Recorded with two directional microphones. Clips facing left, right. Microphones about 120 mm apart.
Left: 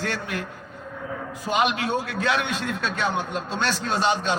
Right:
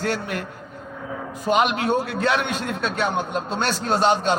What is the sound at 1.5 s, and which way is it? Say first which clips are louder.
Speech: right 2 dB; 45° right (ahead or behind).